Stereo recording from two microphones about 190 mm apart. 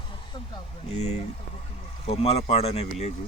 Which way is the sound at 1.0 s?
35° left (ahead or behind).